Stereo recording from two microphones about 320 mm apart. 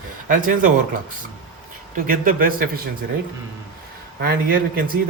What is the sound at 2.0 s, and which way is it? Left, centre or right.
Speech, right.